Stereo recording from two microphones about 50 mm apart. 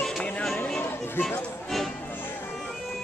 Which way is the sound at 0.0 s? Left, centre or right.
Centre.